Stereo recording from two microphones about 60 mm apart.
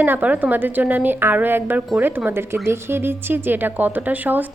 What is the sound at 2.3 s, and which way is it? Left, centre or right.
A woman's voice, right.